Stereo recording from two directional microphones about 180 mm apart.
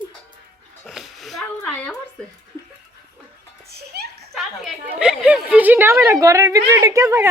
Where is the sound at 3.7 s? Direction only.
60° right (ahead or behind).